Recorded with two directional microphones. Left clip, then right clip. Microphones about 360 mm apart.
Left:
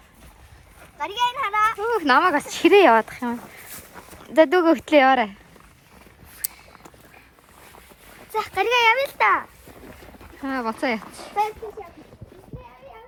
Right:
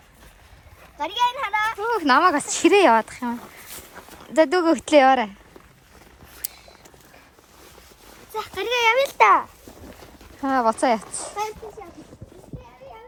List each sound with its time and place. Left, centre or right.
0.9 s a child's voice: right
1.8 s speech: centre
8.3 s a child's voice: centre
10.4 s speech: centre